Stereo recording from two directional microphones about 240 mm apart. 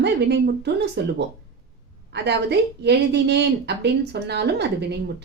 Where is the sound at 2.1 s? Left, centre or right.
Right.